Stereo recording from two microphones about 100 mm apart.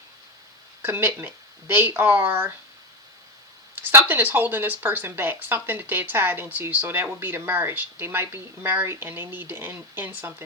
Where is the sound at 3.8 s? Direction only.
20° right (ahead or behind).